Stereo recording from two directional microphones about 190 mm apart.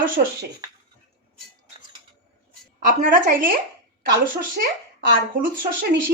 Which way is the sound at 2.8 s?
45° right (ahead or behind).